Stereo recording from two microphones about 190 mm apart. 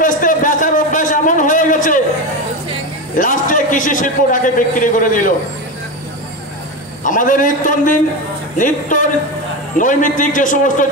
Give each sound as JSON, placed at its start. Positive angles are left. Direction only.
{"t": 0.0, "sound": "a sound", "side_deg": 45}
{"t": 3.2, "sound": "a man's voice", "side_deg": 45}
{"t": 7.0, "sound": "a man's voice", "side_deg": 45}